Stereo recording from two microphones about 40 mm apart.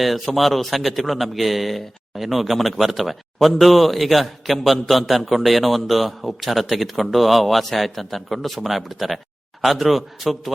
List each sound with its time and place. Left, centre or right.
0.0 s a man's voice: centre